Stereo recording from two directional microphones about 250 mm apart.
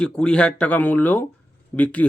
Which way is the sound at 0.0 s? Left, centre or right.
Centre.